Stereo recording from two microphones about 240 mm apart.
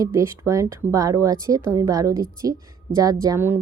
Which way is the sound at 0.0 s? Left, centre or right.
Centre.